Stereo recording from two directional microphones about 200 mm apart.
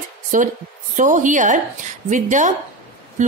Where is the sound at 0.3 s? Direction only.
40° right (ahead or behind).